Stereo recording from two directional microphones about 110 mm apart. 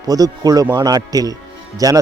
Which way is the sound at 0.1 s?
35° right (ahead or behind).